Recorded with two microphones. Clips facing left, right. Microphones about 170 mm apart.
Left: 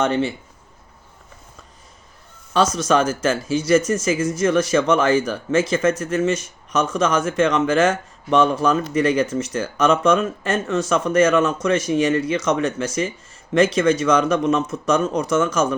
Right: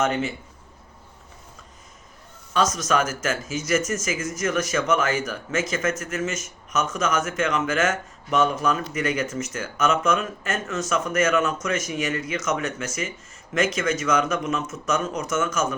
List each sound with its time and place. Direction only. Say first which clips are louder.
0.0 s speech: left 4 dB; 30° left (ahead or behind)
2.5 s speech: left 5 dB; 30° left (ahead or behind)